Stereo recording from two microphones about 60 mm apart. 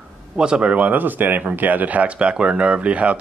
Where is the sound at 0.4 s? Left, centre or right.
Centre.